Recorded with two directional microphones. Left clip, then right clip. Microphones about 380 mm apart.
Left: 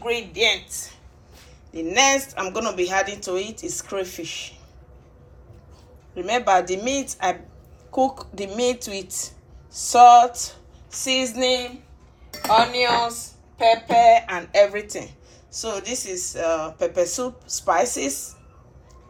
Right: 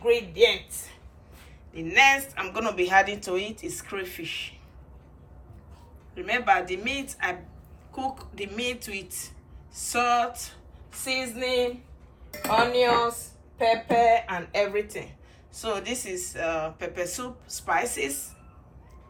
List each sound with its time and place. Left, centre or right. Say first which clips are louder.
0.0 s a sound: right 1 dB; left
1.7 s speech: left 1 dB; centre
6.1 s speech: left 4 dB; centre
12.3 s speech: left 5 dB; left
15.5 s speech: left 2 dB; centre